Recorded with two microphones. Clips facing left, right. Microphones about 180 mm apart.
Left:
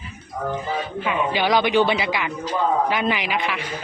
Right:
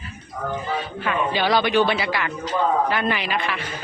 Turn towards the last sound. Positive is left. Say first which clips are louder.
# left 1 dB
turn(degrees=15)  # may be behind; listen again after turning